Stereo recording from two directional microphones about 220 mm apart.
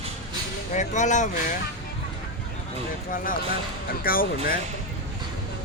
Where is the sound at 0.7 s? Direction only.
35° left (ahead or behind).